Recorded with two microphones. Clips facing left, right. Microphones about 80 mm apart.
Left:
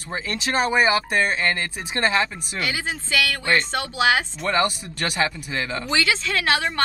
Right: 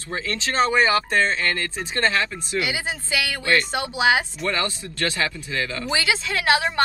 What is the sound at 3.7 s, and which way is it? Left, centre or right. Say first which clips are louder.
Speech: even; right.